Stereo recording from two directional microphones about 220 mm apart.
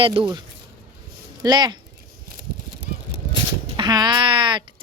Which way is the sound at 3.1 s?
20° right (ahead or behind).